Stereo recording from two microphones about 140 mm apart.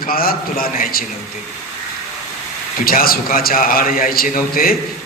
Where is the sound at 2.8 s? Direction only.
90° left.